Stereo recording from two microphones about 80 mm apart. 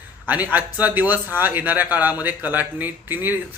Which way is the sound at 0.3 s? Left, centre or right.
Right.